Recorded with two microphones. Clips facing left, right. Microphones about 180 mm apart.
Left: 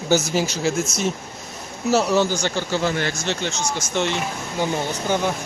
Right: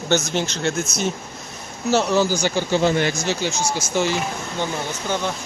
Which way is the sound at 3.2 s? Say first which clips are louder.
Right 2 dB; 5° right (ahead or behind).